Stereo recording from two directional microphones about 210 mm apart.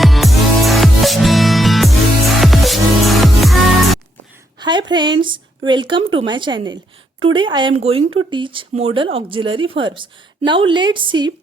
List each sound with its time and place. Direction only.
0.0 s music: centre (ahead or behind)
4.6 s speech: 20° right (ahead or behind)